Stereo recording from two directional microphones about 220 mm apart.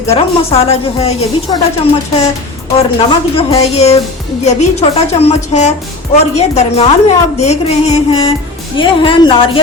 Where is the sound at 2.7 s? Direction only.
25° left (ahead or behind).